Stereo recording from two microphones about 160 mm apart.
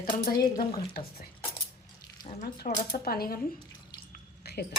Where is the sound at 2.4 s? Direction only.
65° left (ahead or behind).